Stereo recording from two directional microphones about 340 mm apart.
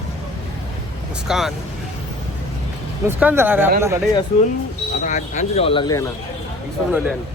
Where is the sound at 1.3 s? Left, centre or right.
Centre.